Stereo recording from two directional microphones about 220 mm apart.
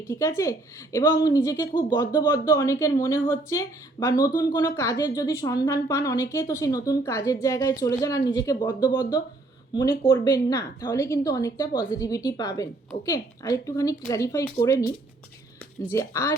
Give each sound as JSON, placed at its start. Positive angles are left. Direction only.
{"t": 0.1, "sound": "a woman's voice", "side_deg": 15}
{"t": 15.9, "sound": "a woman's voice", "side_deg": 15}